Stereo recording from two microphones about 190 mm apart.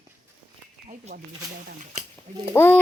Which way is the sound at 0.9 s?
40° right (ahead or behind).